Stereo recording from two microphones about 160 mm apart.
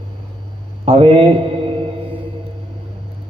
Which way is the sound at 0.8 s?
35° right (ahead or behind).